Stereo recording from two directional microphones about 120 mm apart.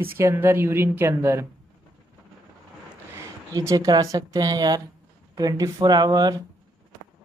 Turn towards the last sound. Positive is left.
turn(degrees=-35)  # may be behind; listen again after turning